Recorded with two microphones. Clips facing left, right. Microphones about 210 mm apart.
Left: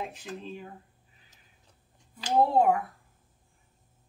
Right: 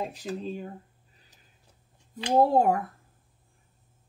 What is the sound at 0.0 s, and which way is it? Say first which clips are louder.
Speech: right 5 dB; 35° right (ahead or behind).